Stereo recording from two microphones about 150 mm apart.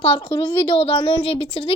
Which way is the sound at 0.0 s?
35° left (ahead or behind).